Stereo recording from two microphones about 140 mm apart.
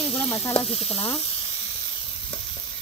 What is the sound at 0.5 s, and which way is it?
Sizzle, 45° left (ahead or behind).